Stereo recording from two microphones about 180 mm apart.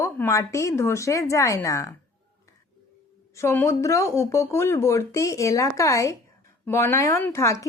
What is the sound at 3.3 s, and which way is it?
Speech, 15° left (ahead or behind).